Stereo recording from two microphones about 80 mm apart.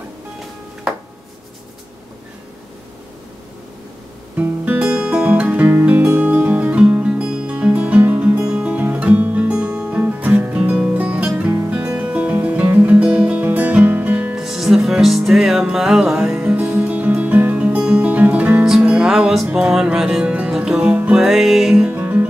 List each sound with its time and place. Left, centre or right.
4.4 s music: centre
14.3 s music: centre
21.9 s music: right